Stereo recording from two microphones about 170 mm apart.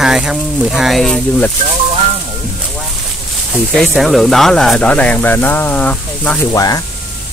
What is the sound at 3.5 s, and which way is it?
Speech, centre (ahead or behind).